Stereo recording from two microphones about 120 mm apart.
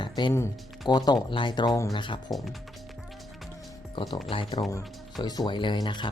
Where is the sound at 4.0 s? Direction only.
45° left (ahead or behind).